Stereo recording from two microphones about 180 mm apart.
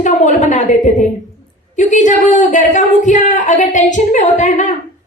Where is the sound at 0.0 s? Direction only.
45° left (ahead or behind).